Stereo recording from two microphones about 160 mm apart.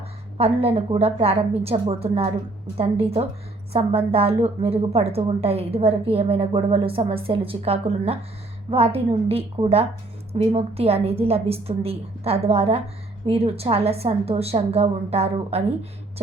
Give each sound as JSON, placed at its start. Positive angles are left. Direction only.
{"t": 0.3, "sound": "a woman's voice", "side_deg": -40}